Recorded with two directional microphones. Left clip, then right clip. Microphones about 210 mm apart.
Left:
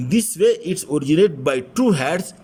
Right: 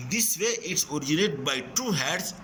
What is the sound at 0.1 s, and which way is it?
A man's voice, 50° left (ahead or behind).